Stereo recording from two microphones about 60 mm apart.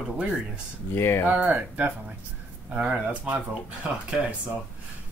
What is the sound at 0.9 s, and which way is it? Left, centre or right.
Speech, left.